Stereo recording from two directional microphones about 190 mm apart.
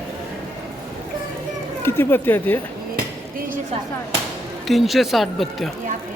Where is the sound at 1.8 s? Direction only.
10° left (ahead or behind).